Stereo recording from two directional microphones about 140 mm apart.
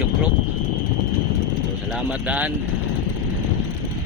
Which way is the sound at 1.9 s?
10° right (ahead or behind).